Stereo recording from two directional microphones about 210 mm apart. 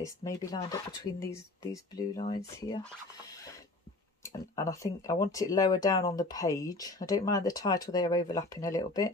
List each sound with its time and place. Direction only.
0.0 s speech: 15° left (ahead or behind)
3.3 s a sound: 15° left (ahead or behind)
4.2 s speech: 15° left (ahead or behind)